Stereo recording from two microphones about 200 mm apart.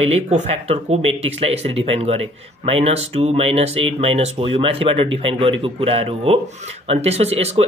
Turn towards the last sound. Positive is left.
turn(degrees=-30)  # may be behind; listen again after turning